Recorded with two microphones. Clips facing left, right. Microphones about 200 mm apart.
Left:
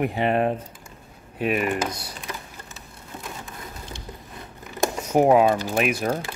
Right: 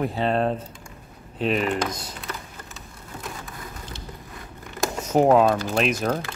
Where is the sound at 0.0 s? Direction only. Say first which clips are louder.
Left 1 dB; 15° left (ahead or behind).